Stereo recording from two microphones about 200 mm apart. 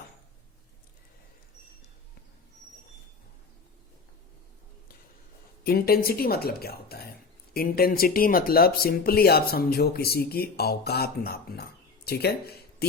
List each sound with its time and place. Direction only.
5.6 s speech: 50° left (ahead or behind)